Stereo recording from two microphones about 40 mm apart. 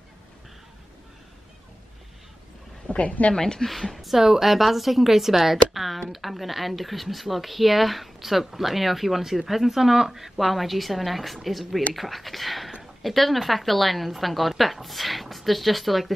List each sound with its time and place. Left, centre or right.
2.9 s a woman's voice: left
3.3 s a woman's voice: centre
3.6 s speech: centre